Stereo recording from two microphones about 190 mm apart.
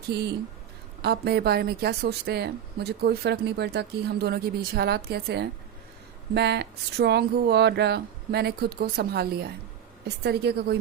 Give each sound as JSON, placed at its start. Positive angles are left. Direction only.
{"t": 0.1, "sound": "a woman's voice", "side_deg": -60}